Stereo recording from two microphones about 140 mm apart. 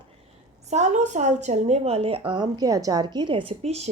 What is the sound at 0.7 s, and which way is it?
A woman's voice, 55° right (ahead or behind).